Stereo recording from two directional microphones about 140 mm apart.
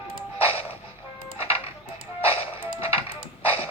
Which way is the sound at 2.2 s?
40° left (ahead or behind).